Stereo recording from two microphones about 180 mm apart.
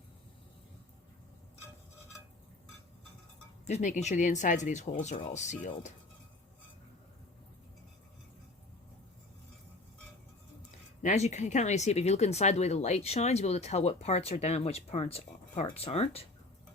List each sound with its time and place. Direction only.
3.7 s speech: 40° left (ahead or behind)
11.0 s speech: 40° left (ahead or behind)